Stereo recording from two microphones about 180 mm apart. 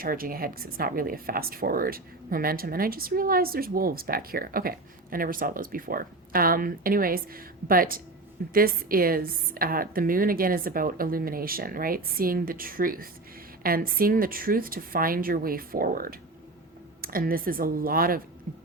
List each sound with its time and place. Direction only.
0.0 s a woman's voice: 55° right (ahead or behind)